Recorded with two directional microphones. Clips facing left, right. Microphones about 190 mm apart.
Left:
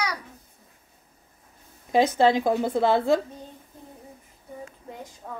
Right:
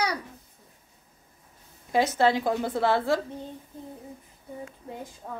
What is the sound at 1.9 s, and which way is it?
A woman's voice, 20° left (ahead or behind).